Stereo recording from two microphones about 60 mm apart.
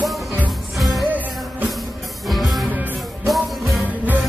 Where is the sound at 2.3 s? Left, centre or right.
Centre.